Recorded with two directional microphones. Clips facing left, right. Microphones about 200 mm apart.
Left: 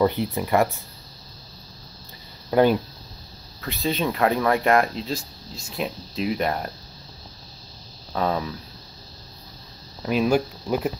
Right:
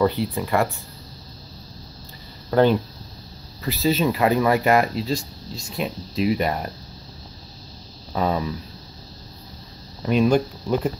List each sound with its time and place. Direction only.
0.0 s speech: 20° left (ahead or behind)
2.5 s speech: 10° left (ahead or behind)
3.6 s speech: centre (ahead or behind)
8.1 s speech: centre (ahead or behind)
10.0 s speech: 5° left (ahead or behind)